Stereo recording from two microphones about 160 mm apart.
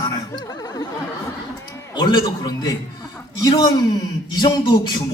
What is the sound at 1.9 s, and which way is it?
Speech, 25° left (ahead or behind).